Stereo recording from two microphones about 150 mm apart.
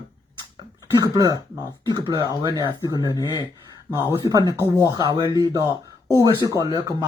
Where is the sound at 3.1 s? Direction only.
25° left (ahead or behind).